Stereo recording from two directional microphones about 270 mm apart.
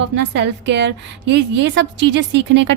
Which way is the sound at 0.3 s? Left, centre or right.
Right.